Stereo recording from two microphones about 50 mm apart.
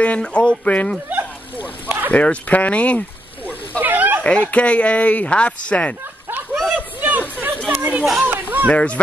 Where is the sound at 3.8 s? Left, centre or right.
Right.